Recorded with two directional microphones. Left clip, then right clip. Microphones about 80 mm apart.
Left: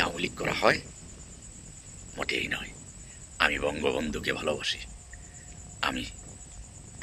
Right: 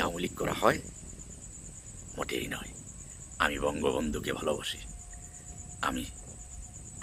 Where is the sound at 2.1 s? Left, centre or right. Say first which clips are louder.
Left 5 dB; right.